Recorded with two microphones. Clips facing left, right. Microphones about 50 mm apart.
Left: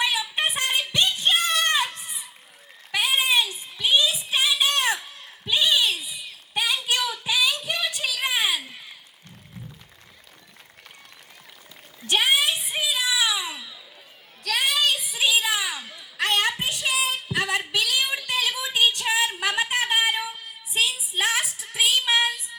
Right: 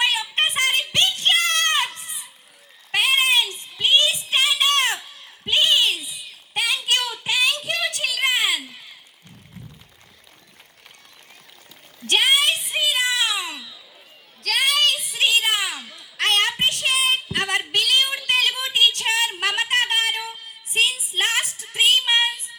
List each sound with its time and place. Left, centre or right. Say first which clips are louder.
0.0 s child singing: right 3 dB; right
2.9 s child singing: right 3 dB; right
5.5 s a sound: right 3 dB; right
6.5 s child singing: right 2 dB; right
7.6 s music: right 2 dB; right
7.9 s a sound: right 3 dB; right
12.0 s a sound: right 3 dB; right
16.6 s child singing: right 4 dB; right
18.3 s music: right 4 dB; right
18.9 s a sound: right 1 dB; right
20.7 s music: right 3 dB; right
21.4 s music: even; centre
21.8 s music: right 3 dB; right